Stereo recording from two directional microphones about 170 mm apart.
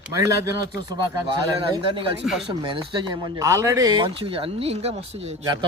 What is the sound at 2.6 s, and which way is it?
Speech, 30° right (ahead or behind).